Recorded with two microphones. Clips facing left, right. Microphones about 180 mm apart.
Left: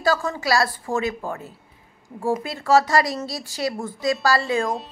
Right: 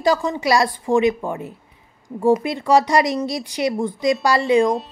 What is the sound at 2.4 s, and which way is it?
Speech, 20° right (ahead or behind).